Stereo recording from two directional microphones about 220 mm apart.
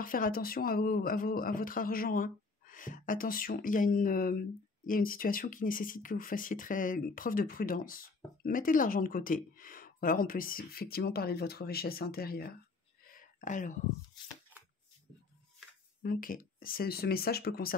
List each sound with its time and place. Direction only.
0.0 s speech: 40° left (ahead or behind)
13.0 s a sound: 40° left (ahead or behind)
16.0 s speech: 40° left (ahead or behind)